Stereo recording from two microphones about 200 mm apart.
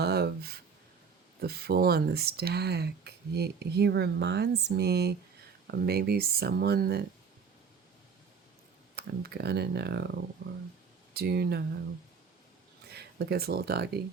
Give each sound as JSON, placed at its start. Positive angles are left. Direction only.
{"t": 0.0, "sound": "a sound", "side_deg": -55}
{"t": 1.4, "sound": "speech", "side_deg": -50}
{"t": 9.0, "sound": "speech", "side_deg": -55}
{"t": 11.1, "sound": "speech", "side_deg": -50}
{"t": 12.9, "sound": "speech", "side_deg": -55}